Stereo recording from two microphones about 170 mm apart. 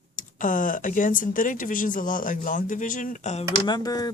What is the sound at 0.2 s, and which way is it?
Speech, 50° left (ahead or behind).